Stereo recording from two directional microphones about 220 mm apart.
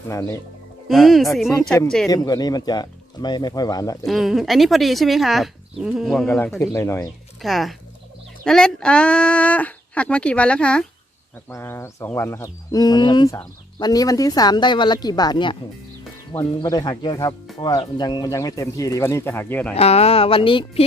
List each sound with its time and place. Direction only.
0.1 s speech: 15° left (ahead or behind)
0.9 s speech: centre (ahead or behind)
2.0 s speech: 15° left (ahead or behind)
4.0 s speech: centre (ahead or behind)
7.4 s speech: centre (ahead or behind)
19.7 s speech: 30° left (ahead or behind)